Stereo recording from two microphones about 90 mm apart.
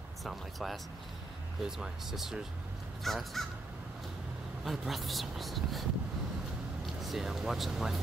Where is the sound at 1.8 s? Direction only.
5° right (ahead or behind).